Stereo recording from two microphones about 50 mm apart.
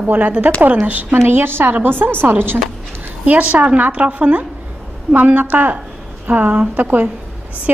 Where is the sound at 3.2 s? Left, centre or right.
Right.